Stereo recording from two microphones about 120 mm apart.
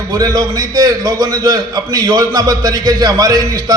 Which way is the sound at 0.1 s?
30° right (ahead or behind).